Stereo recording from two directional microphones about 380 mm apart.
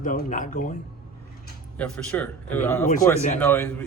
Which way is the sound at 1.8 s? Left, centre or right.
Centre.